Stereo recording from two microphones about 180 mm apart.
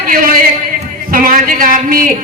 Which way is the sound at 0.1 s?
50° right (ahead or behind).